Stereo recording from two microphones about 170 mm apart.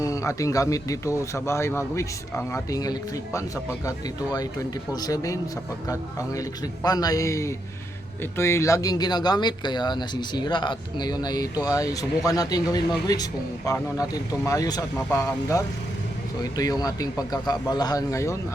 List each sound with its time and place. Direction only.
0.0 s speech: 20° left (ahead or behind)